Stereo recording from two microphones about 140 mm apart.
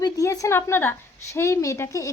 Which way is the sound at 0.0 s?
25° left (ahead or behind).